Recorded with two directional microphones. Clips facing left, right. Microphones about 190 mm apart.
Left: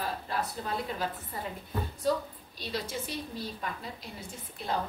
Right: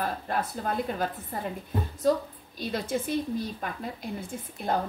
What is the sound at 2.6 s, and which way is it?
A woman's voice, 50° right (ahead or behind).